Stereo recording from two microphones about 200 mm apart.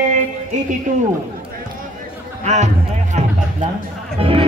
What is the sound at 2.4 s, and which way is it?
Speech, 35° right (ahead or behind).